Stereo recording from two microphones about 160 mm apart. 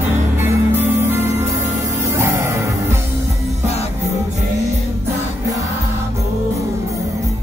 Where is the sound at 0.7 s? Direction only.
15° right (ahead or behind).